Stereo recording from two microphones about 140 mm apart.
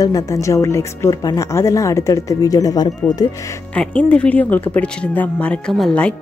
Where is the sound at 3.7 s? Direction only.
10° left (ahead or behind).